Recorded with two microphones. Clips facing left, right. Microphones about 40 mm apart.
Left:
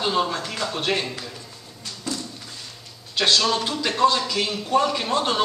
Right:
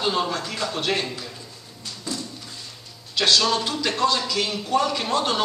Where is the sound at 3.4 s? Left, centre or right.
Centre.